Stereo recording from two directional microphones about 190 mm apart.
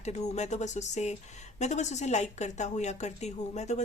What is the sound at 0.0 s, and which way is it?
Speech, 35° left (ahead or behind).